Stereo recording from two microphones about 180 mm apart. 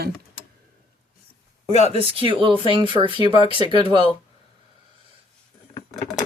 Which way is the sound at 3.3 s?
30° left (ahead or behind).